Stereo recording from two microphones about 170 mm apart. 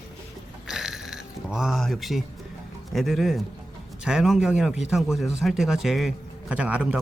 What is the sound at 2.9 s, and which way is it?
A man's voice, centre (ahead or behind).